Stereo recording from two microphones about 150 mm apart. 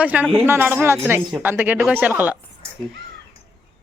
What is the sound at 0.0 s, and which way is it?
Speech, 10° right (ahead or behind).